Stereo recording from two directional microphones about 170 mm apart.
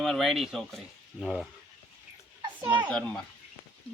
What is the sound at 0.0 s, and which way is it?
Speech, centre (ahead or behind).